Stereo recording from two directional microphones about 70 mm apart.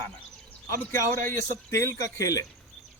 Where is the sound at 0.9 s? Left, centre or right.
Left.